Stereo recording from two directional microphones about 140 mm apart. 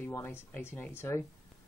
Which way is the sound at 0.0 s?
15° left (ahead or behind).